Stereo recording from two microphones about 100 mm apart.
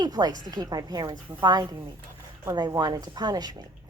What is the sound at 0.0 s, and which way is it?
A woman's voice, 40° right (ahead or behind).